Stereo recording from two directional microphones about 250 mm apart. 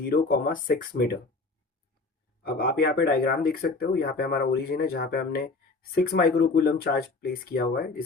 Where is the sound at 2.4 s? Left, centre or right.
Left.